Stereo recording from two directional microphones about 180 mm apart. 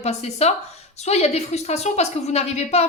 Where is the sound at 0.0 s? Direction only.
35° left (ahead or behind).